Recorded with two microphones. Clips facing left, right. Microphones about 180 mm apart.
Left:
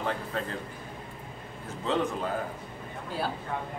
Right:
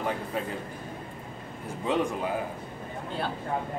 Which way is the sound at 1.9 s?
15° right (ahead or behind).